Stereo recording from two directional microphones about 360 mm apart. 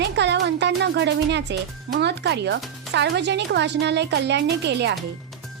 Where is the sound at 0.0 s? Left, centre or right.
Right.